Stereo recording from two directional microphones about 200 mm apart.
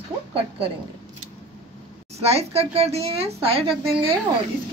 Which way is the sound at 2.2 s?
30° right (ahead or behind).